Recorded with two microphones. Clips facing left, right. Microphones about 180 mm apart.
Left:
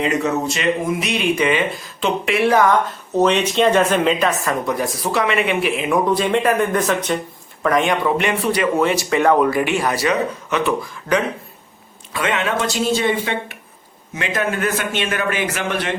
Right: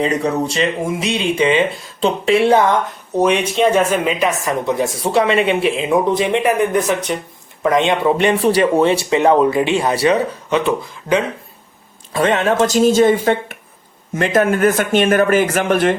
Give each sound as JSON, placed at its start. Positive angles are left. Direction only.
{"t": 0.0, "sound": "speech", "side_deg": -35}
{"t": 3.2, "sound": "speech", "side_deg": -10}
{"t": 12.1, "sound": "speech", "side_deg": -40}